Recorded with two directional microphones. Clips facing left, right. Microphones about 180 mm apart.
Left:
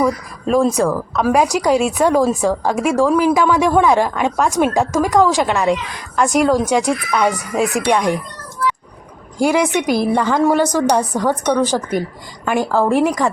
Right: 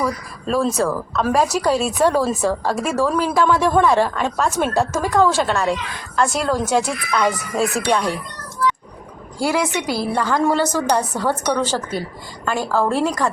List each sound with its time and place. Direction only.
0.0 s speech: 15° left (ahead or behind)
9.4 s speech: 20° left (ahead or behind)